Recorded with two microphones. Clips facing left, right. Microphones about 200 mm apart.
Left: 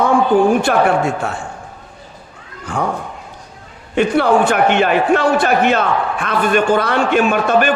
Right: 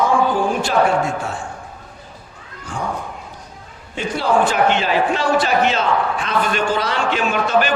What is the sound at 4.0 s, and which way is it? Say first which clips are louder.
A man's voice: left 5 dB; 60° left (ahead or behind).